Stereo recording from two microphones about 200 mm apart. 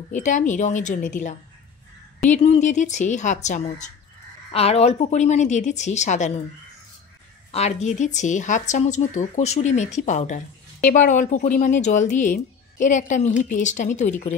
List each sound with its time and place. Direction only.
0.1 s speech: 40° left (ahead or behind)
2.3 s speech: 35° left (ahead or behind)
7.5 s speech: 35° left (ahead or behind)